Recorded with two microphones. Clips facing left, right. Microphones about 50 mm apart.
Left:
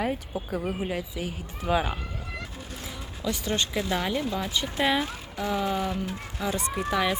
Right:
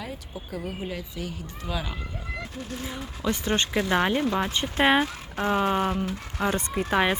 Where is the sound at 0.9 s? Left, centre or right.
Centre.